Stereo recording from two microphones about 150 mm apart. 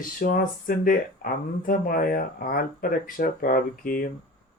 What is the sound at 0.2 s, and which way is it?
Speech, 65° left (ahead or behind).